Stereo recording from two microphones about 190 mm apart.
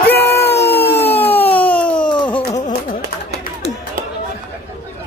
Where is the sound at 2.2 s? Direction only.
25° left (ahead or behind).